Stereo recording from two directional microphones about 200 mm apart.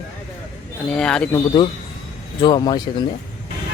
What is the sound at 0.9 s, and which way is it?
Speech, 5° left (ahead or behind).